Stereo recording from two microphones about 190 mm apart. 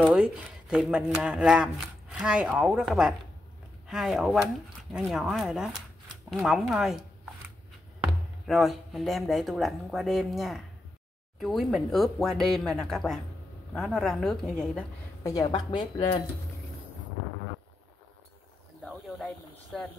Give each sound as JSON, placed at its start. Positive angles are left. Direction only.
{"t": 0.0, "sound": "speech", "side_deg": -5}
{"t": 15.2, "sound": "speech", "side_deg": 20}
{"t": 18.9, "sound": "snake", "side_deg": 0}